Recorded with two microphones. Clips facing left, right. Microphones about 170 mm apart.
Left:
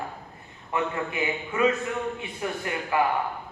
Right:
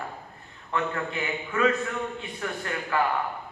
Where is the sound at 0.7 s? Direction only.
15° left (ahead or behind).